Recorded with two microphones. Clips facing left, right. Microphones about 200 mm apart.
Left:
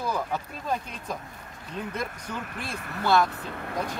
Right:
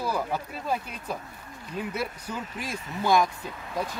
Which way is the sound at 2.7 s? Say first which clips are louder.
Right 1 dB; 60° left (ahead or behind).